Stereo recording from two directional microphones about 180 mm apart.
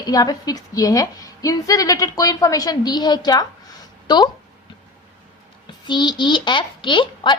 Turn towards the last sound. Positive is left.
turn(degrees=25)  # may be behind; listen again after turning